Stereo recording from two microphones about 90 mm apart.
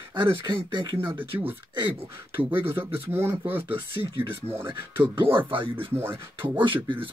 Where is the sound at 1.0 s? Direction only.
70° right (ahead or behind).